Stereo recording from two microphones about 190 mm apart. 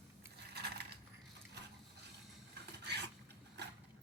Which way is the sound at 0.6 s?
60° right (ahead or behind).